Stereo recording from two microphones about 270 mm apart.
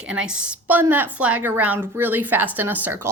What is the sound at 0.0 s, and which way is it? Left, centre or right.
A woman's voice, centre.